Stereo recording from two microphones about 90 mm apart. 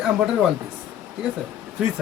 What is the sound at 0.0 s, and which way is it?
Speech, 5° right (ahead or behind).